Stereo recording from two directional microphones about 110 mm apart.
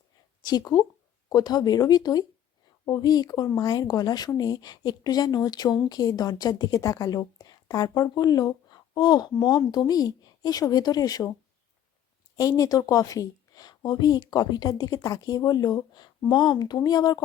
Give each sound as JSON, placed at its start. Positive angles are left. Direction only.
{"t": 0.5, "sound": "speech", "side_deg": 35}
{"t": 12.4, "sound": "speech", "side_deg": 35}